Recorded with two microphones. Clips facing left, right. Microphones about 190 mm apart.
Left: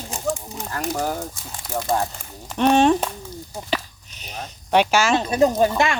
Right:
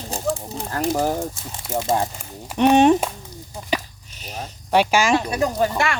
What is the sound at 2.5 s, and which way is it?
Speech, 10° right (ahead or behind).